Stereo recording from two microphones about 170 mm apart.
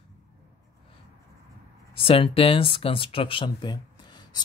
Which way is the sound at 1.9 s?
30° left (ahead or behind).